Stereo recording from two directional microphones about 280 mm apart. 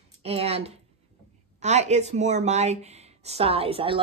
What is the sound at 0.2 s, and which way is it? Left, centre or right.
A woman's voice, right.